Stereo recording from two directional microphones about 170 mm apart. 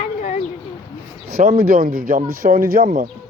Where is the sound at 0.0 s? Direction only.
40° left (ahead or behind).